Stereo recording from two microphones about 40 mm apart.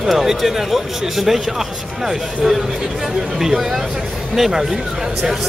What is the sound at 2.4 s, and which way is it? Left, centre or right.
Speech, centre.